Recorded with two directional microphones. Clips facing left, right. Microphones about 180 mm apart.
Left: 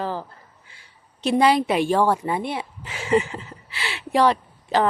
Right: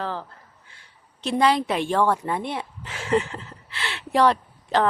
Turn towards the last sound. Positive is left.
turn(degrees=5)  # may be behind; listen again after turning